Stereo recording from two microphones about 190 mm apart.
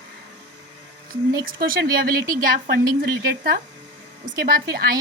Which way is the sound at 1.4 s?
50° right (ahead or behind).